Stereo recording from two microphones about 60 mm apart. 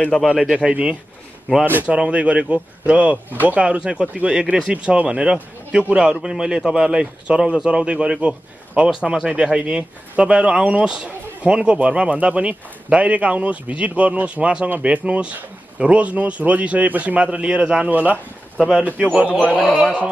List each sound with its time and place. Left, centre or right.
0.3 s speech: centre
1.7 s speech: right
2.0 s a man's voice: right